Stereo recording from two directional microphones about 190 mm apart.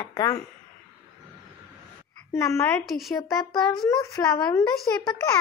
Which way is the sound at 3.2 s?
20° left (ahead or behind).